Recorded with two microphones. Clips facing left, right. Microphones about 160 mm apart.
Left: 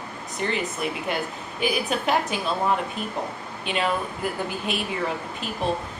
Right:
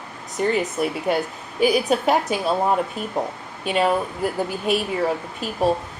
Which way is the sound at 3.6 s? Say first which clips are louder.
Right 6 dB; 45° right (ahead or behind).